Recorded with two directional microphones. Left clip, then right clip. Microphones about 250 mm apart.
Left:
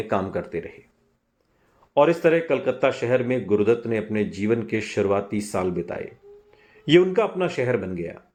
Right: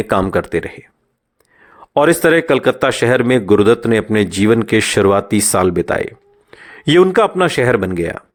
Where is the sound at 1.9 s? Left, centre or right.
Right.